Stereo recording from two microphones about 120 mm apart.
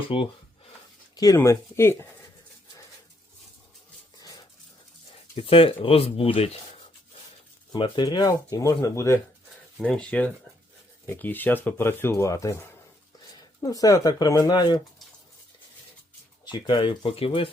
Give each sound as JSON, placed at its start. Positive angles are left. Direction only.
{"t": 0.1, "sound": "speech", "side_deg": 50}
{"t": 1.1, "sound": "a sound", "side_deg": 30}
{"t": 1.4, "sound": "speech", "side_deg": 20}
{"t": 4.2, "sound": "dog", "side_deg": 30}
{"t": 5.4, "sound": "speech", "side_deg": 50}
{"t": 7.7, "sound": "speech", "side_deg": 40}
{"t": 9.8, "sound": "speech", "side_deg": 10}
{"t": 16.5, "sound": "speech", "side_deg": 40}
{"t": 17.0, "sound": "speech", "side_deg": 50}